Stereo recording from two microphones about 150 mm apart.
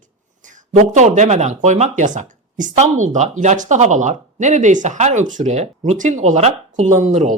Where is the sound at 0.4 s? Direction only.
55° right (ahead or behind).